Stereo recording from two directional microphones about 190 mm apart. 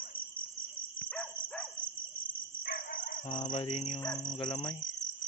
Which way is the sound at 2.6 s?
50° left (ahead or behind).